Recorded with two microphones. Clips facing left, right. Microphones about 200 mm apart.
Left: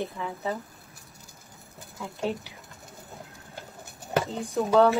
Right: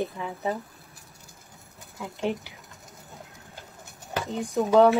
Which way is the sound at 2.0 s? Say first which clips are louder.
Right 1 dB; 15° right (ahead or behind).